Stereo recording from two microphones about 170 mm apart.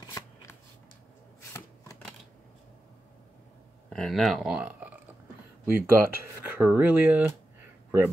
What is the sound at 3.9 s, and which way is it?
Speech, centre (ahead or behind).